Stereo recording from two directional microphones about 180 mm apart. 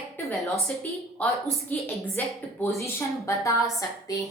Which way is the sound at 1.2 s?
5° left (ahead or behind).